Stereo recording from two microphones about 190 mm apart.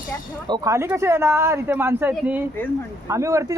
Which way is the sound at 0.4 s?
20° right (ahead or behind).